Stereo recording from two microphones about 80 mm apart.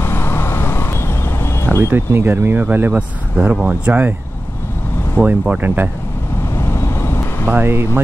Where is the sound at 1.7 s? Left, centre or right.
Right.